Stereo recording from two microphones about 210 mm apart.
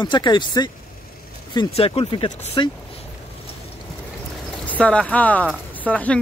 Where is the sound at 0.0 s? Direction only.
20° left (ahead or behind).